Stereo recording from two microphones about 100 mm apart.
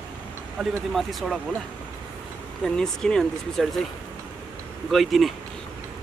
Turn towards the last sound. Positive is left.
turn(degrees=0)  # may be behind; listen again after turning